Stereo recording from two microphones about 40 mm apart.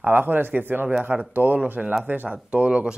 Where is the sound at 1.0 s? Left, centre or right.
Right.